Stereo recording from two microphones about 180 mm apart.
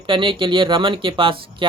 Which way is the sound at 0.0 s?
25° right (ahead or behind).